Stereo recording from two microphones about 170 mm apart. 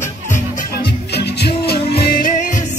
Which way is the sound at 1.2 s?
70° left (ahead or behind).